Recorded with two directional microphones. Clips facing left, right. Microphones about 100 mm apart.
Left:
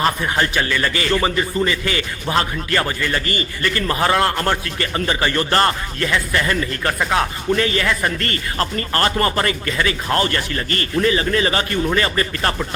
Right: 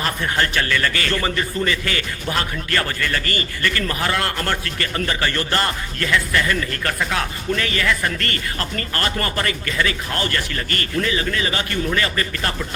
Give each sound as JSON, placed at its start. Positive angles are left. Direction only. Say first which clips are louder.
{"t": 0.2, "sound": "a man's voice", "louder": "left 2 dB", "side_deg": 15}